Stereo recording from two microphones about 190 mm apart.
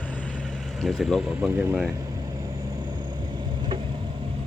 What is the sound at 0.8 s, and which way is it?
Speech, centre (ahead or behind).